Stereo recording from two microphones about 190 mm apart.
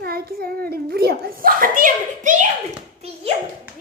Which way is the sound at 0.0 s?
50° right (ahead or behind).